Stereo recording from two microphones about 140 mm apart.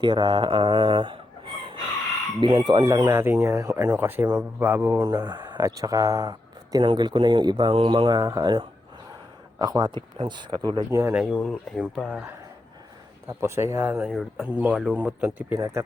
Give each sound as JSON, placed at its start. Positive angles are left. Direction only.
{"t": 0.0, "sound": "fowl", "side_deg": -35}
{"t": 2.4, "sound": "speech", "side_deg": -35}
{"t": 3.0, "sound": "speech", "side_deg": -15}
{"t": 5.0, "sound": "speech", "side_deg": -30}
{"t": 11.0, "sound": "speech", "side_deg": -5}
{"t": 11.3, "sound": "speech", "side_deg": 5}
{"t": 11.9, "sound": "speech", "side_deg": -10}
{"t": 13.2, "sound": "speech", "side_deg": -20}
{"t": 14.1, "sound": "speech", "side_deg": 0}
{"t": 14.4, "sound": "speech", "side_deg": -10}
{"t": 15.5, "sound": "speech", "side_deg": -20}